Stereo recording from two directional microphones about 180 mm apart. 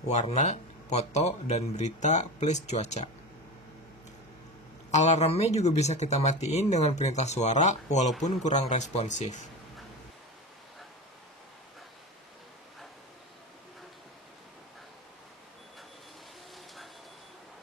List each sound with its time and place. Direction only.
0.3 s speech: 40° left (ahead or behind)
4.9 s speech: 40° left (ahead or behind)